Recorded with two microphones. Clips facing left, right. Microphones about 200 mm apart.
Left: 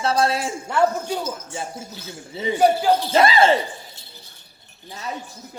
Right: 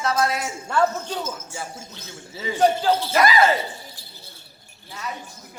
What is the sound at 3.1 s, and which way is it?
Speech, 25° left (ahead or behind).